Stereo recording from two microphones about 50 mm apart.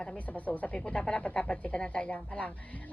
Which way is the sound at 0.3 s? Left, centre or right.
Left.